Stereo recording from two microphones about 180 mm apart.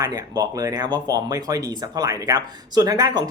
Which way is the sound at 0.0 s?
20° right (ahead or behind).